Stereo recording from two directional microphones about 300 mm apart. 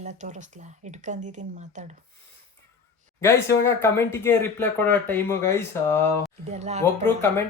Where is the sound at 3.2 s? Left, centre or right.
Centre.